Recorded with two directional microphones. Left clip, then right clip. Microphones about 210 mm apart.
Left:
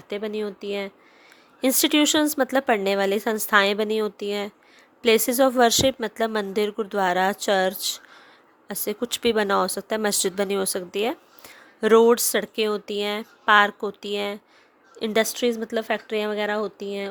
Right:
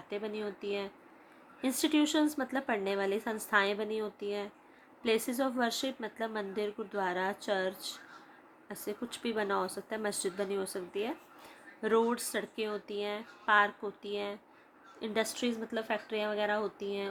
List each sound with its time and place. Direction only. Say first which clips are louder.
0.1 s a woman's voice: left 9 dB; 45° left (ahead or behind)